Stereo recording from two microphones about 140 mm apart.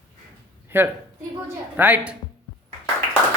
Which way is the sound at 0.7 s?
15° right (ahead or behind).